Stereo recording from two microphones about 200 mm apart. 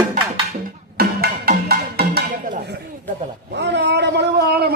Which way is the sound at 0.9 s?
50° right (ahead or behind).